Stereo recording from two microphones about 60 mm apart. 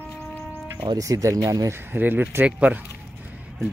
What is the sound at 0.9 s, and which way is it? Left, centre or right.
Speech, right.